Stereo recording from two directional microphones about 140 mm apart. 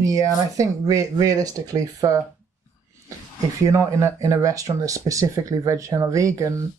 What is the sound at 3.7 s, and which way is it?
Speech, 20° right (ahead or behind).